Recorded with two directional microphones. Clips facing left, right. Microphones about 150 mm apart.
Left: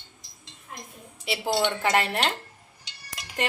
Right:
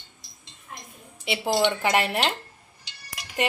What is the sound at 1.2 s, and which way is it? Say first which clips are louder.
Speech: right 2 dB; centre (ahead or behind).